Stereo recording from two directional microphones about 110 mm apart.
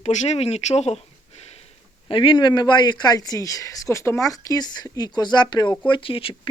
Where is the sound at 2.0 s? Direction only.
50° left (ahead or behind).